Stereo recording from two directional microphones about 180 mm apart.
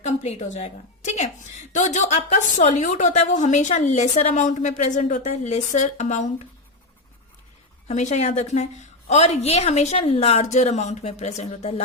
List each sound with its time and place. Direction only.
0.0 s a woman's voice: 40° left (ahead or behind)
7.9 s a woman's voice: 40° left (ahead or behind)